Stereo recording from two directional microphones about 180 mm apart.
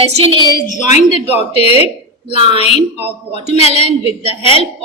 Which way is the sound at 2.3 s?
30° right (ahead or behind).